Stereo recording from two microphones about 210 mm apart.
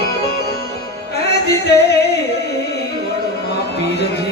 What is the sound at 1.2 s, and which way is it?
Music, 50° left (ahead or behind).